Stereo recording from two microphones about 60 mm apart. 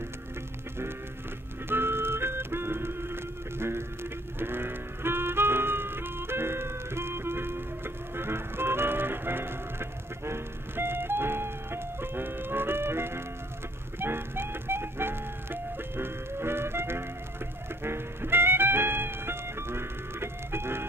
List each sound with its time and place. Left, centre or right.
1.7 s music: right